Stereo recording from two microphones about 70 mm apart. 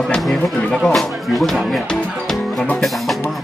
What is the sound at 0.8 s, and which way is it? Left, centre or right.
Music, centre.